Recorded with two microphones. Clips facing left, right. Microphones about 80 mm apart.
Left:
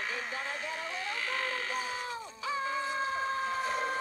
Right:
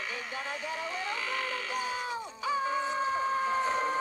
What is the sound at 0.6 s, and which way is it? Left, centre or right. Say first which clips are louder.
Music: right 2 dB; centre.